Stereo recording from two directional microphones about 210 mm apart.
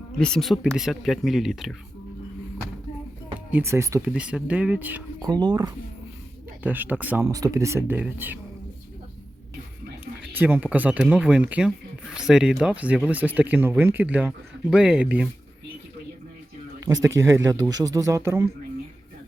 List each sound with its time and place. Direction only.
0.2 s speech: 5° left (ahead or behind)
3.5 s speech: 10° right (ahead or behind)
5.3 s speech: 20° right (ahead or behind)
6.6 s speech: 10° right (ahead or behind)
10.3 s speech: 10° right (ahead or behind)
16.8 s speech: 15° right (ahead or behind)